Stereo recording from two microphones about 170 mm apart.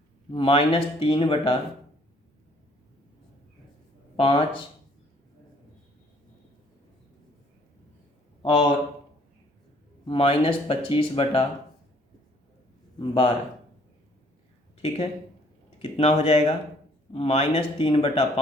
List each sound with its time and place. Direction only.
0.3 s speech: 30° left (ahead or behind)
4.2 s speech: 30° left (ahead or behind)
10.1 s speech: 35° left (ahead or behind)
13.0 s speech: 30° left (ahead or behind)
14.8 s speech: 35° left (ahead or behind)